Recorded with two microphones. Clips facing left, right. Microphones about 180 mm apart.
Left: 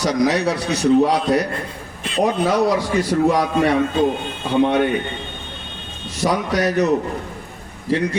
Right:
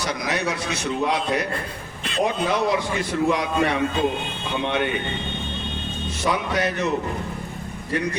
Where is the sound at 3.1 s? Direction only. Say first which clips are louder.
Left 6 dB; 45° left (ahead or behind).